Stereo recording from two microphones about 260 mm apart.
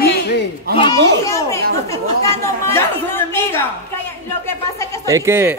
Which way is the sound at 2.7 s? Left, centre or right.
Centre.